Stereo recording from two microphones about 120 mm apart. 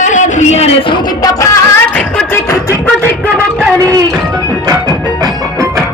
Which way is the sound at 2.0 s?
10° left (ahead or behind).